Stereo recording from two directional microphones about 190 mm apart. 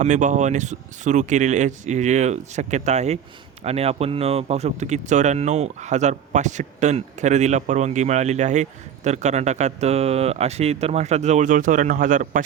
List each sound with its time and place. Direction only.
0.0 s speech: 40° right (ahead or behind)